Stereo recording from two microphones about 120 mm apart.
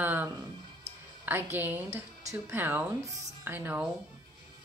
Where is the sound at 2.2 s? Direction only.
25° right (ahead or behind).